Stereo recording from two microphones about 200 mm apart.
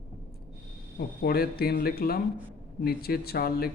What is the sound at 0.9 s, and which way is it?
Speech, 50° left (ahead or behind).